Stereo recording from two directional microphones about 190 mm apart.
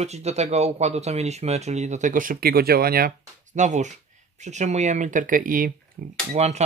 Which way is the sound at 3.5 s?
40° right (ahead or behind).